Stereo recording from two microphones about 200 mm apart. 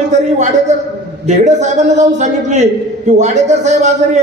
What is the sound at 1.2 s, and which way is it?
A man's voice, 35° right (ahead or behind).